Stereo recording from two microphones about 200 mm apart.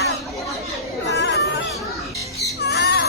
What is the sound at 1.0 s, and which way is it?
Chatter, 60° left (ahead or behind).